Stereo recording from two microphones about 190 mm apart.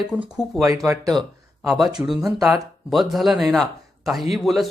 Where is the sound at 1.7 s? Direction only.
Centre (ahead or behind).